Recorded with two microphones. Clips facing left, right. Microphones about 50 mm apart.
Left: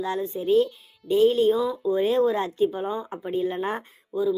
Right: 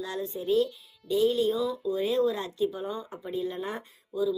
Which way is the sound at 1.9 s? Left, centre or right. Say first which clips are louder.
Left 5 dB; left.